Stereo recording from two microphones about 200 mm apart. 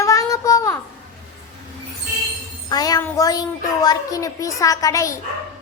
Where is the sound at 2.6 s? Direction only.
20° left (ahead or behind).